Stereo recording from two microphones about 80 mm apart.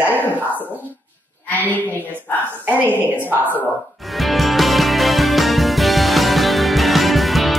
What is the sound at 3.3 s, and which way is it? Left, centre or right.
Speech, right.